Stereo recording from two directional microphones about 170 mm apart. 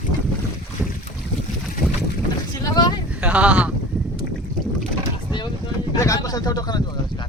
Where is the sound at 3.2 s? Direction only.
5° right (ahead or behind).